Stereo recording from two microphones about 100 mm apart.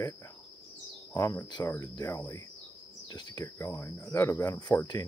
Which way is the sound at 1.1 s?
30° left (ahead or behind).